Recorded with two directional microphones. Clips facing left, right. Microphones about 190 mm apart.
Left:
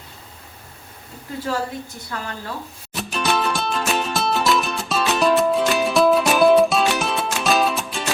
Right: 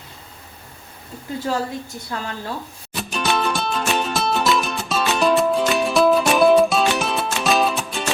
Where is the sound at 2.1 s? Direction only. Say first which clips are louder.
Right 2 dB; 25° right (ahead or behind).